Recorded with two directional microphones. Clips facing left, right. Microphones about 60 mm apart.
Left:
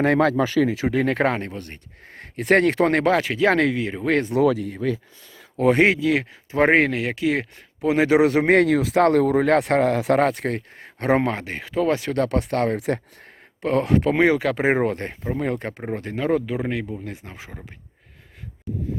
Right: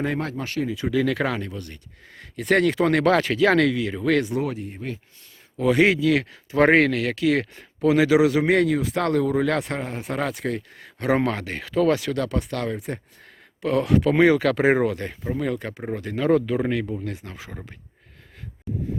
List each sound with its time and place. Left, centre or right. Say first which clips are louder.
0.6 s speech: left 6 dB; left
0.9 s speech: left 2 dB; left
3.0 s speech: even; centre
4.4 s speech: left 8 dB; left
5.5 s speech: left 1 dB; left
9.0 s a man's voice: left 2 dB; left
10.2 s speech: left 5 dB; left
11.2 s speech: even; left
12.7 s speech: left 7 dB; left
13.6 s speech: left 1 dB; left
16.1 s speech: right 3 dB; left